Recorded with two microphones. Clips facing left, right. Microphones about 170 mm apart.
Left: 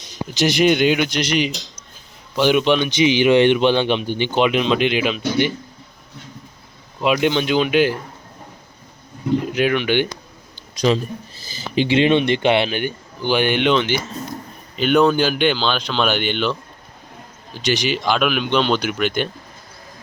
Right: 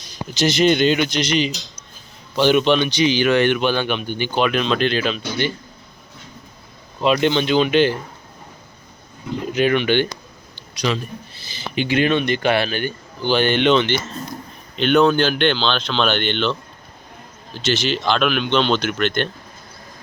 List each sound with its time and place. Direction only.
0.0 s speech: 20° left (ahead or behind)
3.0 s speech: 20° left (ahead or behind)
7.0 s speech: 5° left (ahead or behind)
9.5 s speech: 5° left (ahead or behind)
11.7 s speech: 30° left (ahead or behind); by 19.3 s 10° left (ahead or behind)